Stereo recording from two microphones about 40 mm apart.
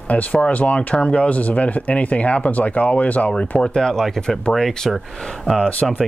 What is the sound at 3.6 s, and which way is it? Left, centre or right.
Speech, centre.